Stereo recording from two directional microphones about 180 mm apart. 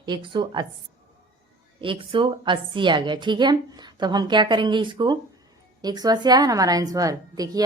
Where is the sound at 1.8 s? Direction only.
30° right (ahead or behind).